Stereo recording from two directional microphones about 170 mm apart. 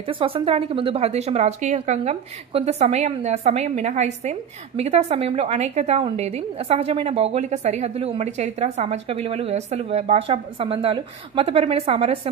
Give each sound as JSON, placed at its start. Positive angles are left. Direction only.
{"t": 0.1, "sound": "speech", "side_deg": -30}